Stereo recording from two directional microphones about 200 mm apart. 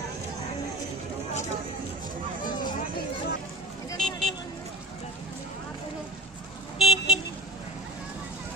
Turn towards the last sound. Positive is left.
turn(degrees=0)  # may be behind; listen again after turning